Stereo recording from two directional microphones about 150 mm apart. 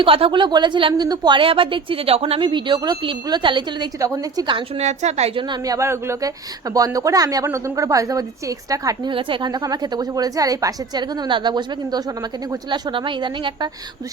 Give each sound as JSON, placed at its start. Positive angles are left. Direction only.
{"t": 0.0, "sound": "a woman's voice", "side_deg": -35}
{"t": 4.8, "sound": "a woman's voice", "side_deg": -50}